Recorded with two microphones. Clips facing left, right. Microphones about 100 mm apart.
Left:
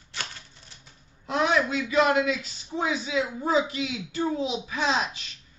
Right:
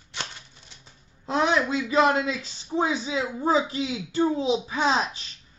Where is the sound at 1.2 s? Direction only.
30° right (ahead or behind).